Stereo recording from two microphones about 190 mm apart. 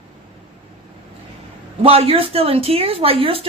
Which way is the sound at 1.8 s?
30° right (ahead or behind).